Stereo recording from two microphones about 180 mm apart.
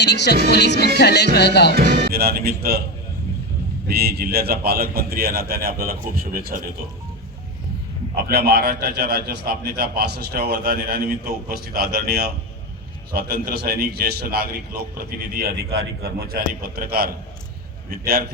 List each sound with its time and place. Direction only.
0.0 s speech: 70° left (ahead or behind)
1.7 s a man's voice: 55° right (ahead or behind)
3.8 s a man's voice: 60° right (ahead or behind)
8.1 s a man's voice: 60° right (ahead or behind)